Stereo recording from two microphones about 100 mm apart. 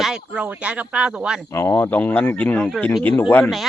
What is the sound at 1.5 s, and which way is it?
Speech, 25° left (ahead or behind).